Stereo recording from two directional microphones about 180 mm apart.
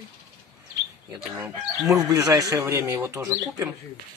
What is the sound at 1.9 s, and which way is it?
Speech, 20° right (ahead or behind).